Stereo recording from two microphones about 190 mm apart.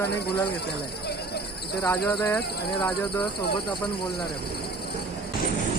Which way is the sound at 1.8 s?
5° left (ahead or behind).